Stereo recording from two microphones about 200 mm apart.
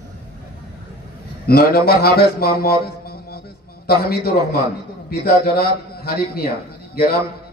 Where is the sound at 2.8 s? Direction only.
50° left (ahead or behind).